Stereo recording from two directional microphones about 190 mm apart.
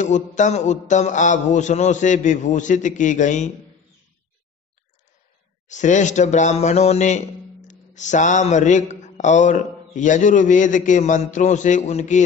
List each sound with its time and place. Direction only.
0.0 s a man's voice: 40° left (ahead or behind)
5.7 s a man's voice: 40° left (ahead or behind)